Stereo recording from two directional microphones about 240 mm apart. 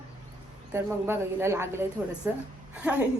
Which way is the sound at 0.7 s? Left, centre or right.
Centre.